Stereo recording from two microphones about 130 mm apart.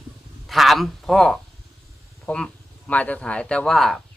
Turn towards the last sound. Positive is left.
turn(degrees=0)  # may be behind; listen again after turning